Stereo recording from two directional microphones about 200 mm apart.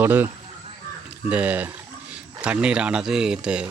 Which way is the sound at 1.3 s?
5° right (ahead or behind).